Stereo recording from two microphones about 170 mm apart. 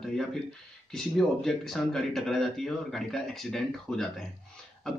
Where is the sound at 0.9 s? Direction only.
Centre (ahead or behind).